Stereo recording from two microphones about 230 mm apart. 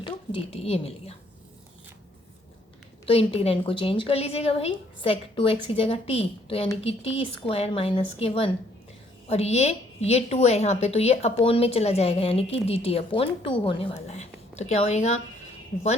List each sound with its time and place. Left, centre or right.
0.0 s a woman's voice: left
3.1 s a woman's voice: left